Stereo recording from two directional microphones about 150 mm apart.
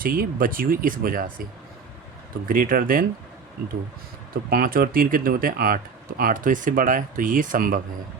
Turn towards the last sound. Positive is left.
turn(degrees=-70)  # may be behind; listen again after turning